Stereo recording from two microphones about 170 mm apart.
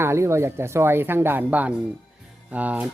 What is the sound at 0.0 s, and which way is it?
Speech, 15° right (ahead or behind).